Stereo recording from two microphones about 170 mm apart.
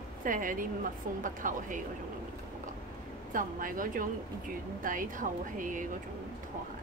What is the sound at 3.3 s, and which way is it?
Speech, 55° right (ahead or behind).